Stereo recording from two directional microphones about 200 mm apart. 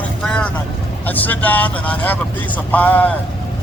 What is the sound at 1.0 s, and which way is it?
A man's voice, 10° left (ahead or behind).